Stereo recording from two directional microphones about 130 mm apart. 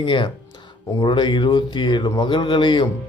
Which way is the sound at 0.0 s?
40° left (ahead or behind).